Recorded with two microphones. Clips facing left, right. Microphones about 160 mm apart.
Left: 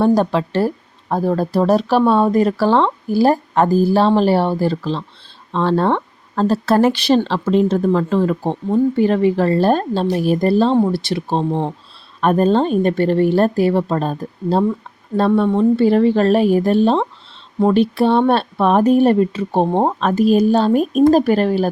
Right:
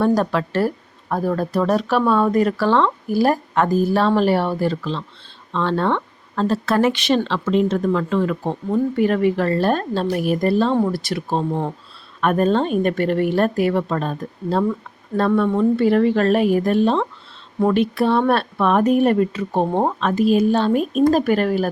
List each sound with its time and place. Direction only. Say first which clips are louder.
0.0 s speech: left 3 dB; 30° left (ahead or behind)
20.0 s speech: left 2 dB; 40° left (ahead or behind)